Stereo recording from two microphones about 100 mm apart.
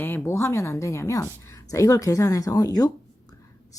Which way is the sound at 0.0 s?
25° left (ahead or behind).